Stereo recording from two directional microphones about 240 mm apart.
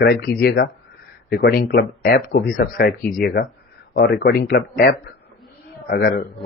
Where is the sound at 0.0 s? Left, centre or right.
Left.